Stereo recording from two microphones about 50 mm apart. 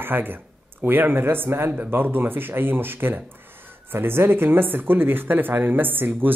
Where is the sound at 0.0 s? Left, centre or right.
Right.